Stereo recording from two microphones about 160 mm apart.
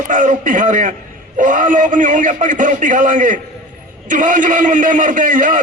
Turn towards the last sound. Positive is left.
turn(degrees=-55)  # may be behind; listen again after turning